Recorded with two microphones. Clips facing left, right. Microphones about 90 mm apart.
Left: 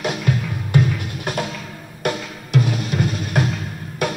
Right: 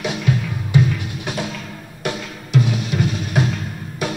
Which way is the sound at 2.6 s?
Centre (ahead or behind).